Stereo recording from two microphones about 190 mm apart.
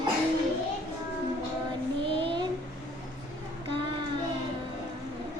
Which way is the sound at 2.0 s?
25° right (ahead or behind).